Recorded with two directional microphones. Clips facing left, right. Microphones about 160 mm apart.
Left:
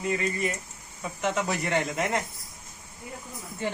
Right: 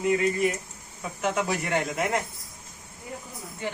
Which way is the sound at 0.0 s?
10° right (ahead or behind).